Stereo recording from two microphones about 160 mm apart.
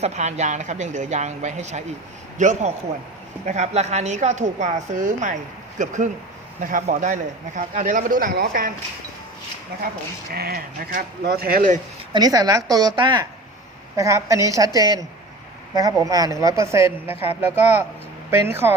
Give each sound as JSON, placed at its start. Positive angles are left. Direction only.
{"t": 0.0, "sound": "a woman's voice", "side_deg": -45}
{"t": 10.3, "sound": "speech", "side_deg": -75}
{"t": 12.1, "sound": "a woman's voice", "side_deg": -25}
{"t": 17.1, "sound": "speech", "side_deg": 35}
{"t": 17.6, "sound": "speech", "side_deg": -15}